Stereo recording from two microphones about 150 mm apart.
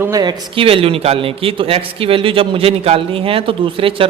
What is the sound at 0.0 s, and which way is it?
A man's voice, 25° right (ahead or behind).